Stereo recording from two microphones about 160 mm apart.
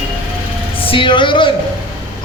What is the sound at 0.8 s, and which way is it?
Speech, 35° left (ahead or behind).